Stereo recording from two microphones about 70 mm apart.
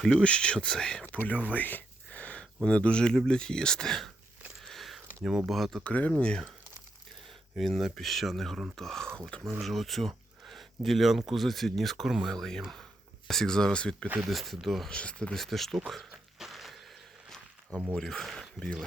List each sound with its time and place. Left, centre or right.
0.2 s speech: centre
4.6 s a sound: centre
5.5 s speech: centre
5.8 s speech: centre
7.5 s speech: centre
14.2 s speech: centre
14.8 s speech: centre
15.4 s speech: centre
15.9 s a sound: centre
17.7 s speech: right
17.9 s speech: centre